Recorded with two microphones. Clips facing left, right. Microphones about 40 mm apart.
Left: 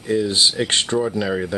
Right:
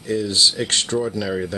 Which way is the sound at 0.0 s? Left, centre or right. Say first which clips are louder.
Left 1 dB; left.